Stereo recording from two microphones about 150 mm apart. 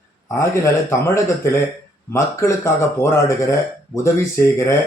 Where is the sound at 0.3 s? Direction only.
20° left (ahead or behind).